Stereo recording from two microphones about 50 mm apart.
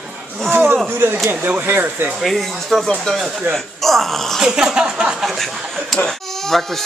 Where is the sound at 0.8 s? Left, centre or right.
Right.